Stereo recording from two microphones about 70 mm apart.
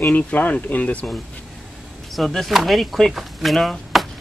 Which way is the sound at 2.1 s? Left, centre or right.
Centre.